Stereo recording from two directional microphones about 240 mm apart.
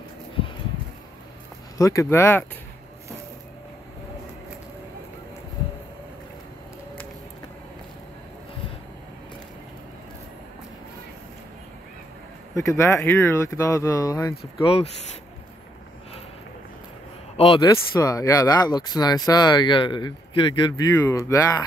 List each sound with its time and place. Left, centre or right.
1.8 s speech: centre
12.5 s speech: centre
17.4 s speech: centre